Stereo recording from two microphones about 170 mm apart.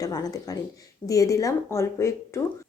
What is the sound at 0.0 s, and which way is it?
A woman's voice, 20° left (ahead or behind).